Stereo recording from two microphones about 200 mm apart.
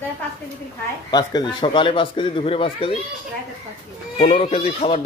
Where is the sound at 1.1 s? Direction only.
20° left (ahead or behind).